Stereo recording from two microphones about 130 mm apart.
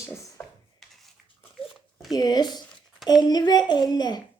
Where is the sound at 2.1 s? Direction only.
30° left (ahead or behind).